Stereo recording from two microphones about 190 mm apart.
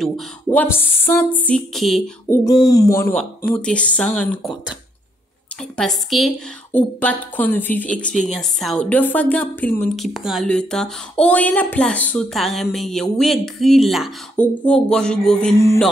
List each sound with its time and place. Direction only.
0.0 s speech: 5° left (ahead or behind)
2.2 s a sound: 10° left (ahead or behind)
2.6 s speech: 20° left (ahead or behind); by 4.7 s centre (ahead or behind)
5.8 s speech: centre (ahead or behind)